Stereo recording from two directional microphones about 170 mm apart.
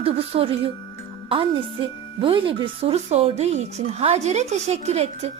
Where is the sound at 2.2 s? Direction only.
30° right (ahead or behind).